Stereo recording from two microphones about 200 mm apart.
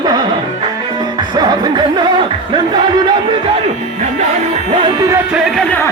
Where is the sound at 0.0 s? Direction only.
20° right (ahead or behind).